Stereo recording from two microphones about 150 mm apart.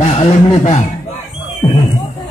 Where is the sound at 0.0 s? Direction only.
35° left (ahead or behind).